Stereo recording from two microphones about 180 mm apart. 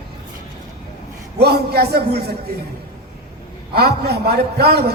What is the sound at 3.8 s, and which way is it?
A man's voice, 60° right (ahead or behind).